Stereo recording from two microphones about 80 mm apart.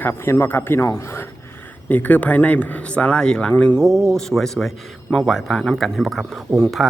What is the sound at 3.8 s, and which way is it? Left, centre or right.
Speech, centre.